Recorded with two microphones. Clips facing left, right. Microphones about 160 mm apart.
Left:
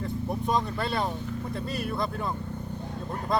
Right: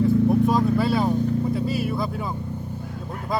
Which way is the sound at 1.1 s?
40° right (ahead or behind).